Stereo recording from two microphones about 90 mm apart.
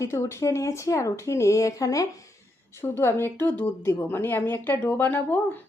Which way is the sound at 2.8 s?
30° left (ahead or behind).